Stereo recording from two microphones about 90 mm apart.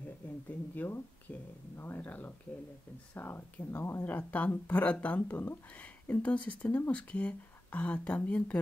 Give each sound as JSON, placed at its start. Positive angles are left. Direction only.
{"t": 0.5, "sound": "speech", "side_deg": 25}